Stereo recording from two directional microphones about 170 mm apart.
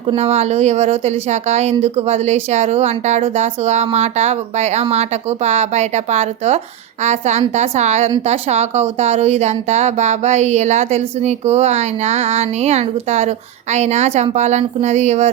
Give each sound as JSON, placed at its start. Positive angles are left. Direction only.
{"t": 0.2, "sound": "speech", "side_deg": -40}